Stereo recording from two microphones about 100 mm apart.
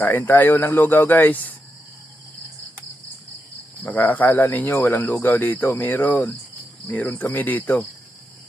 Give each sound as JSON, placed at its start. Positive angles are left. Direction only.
{"t": 0.0, "sound": "speech", "side_deg": 20}
{"t": 3.8, "sound": "speech", "side_deg": 15}